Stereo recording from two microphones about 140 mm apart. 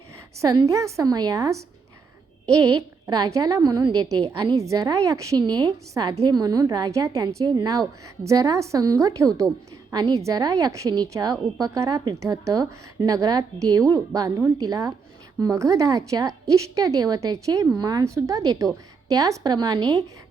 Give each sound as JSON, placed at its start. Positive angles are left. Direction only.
{"t": 0.4, "sound": "a woman's voice", "side_deg": -25}
{"t": 3.1, "sound": "a woman's voice", "side_deg": -25}